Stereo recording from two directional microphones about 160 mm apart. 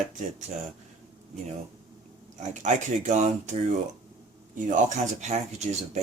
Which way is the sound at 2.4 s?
50° right (ahead or behind).